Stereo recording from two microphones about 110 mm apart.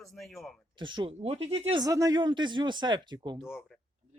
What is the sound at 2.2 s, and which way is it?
Speech, 45° right (ahead or behind).